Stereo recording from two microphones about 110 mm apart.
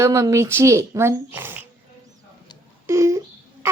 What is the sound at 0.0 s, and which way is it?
A child's voice, 30° right (ahead or behind).